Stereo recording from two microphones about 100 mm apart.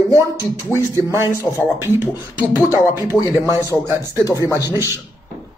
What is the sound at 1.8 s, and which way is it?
Speech, 20° right (ahead or behind).